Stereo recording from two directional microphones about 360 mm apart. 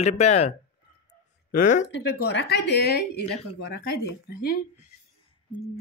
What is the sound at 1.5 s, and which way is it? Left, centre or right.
Speech, left.